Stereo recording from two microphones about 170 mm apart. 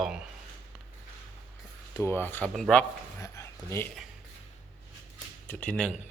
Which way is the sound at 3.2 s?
20° left (ahead or behind).